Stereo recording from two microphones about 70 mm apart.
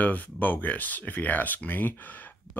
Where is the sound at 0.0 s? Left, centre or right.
Left.